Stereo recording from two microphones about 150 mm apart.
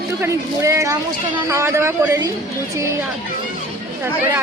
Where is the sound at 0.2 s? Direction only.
20° right (ahead or behind).